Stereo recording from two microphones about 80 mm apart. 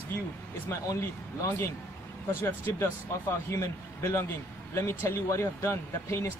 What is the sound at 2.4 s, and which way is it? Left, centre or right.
A man's voice, left.